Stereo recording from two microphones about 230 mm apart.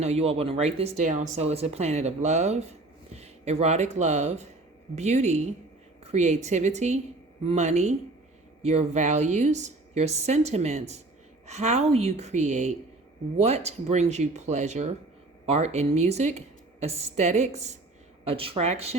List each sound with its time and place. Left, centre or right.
0.0 s speech: right